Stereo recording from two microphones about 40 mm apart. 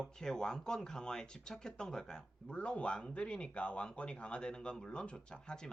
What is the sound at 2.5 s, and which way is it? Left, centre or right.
Speech, left.